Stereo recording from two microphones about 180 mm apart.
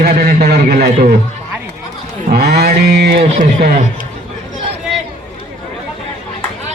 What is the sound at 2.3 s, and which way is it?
Mantra, 60° right (ahead or behind).